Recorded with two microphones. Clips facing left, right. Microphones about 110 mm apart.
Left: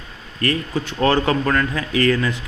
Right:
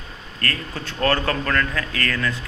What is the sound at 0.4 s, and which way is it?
Speech, 15° left (ahead or behind).